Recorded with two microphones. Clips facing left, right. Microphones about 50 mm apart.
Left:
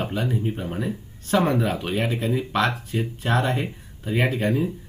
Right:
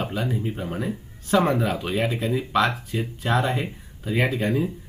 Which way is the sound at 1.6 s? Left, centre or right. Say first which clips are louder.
Even; left.